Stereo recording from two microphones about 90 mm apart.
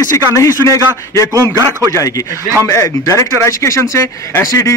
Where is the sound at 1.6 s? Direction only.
35° right (ahead or behind).